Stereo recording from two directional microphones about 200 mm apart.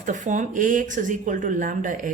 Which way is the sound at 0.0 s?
40° right (ahead or behind).